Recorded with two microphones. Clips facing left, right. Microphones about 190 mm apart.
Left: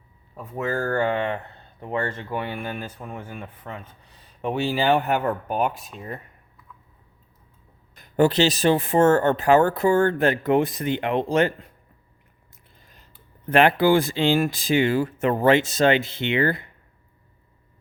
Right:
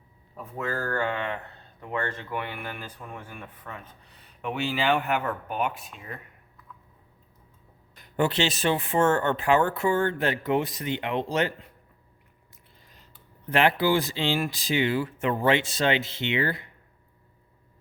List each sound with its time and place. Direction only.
0.5 s speech: 25° left (ahead or behind)
7.9 s speech: 40° left (ahead or behind)
13.5 s speech: 50° left (ahead or behind)